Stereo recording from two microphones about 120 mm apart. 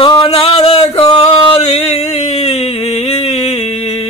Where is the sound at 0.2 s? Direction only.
50° left (ahead or behind).